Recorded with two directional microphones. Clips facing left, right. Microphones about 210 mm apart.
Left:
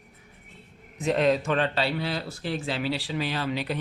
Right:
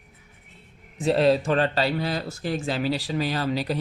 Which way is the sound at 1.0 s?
35° right (ahead or behind).